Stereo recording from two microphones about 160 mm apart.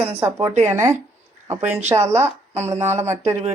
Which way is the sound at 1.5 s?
45° right (ahead or behind).